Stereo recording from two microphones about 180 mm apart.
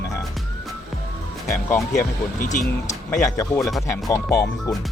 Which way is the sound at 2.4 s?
45° left (ahead or behind).